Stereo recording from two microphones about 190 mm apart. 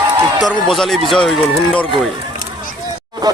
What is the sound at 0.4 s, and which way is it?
Speech, centre (ahead or behind).